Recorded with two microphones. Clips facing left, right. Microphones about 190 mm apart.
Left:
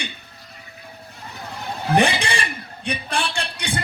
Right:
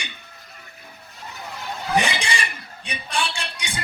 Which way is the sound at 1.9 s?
60° left (ahead or behind).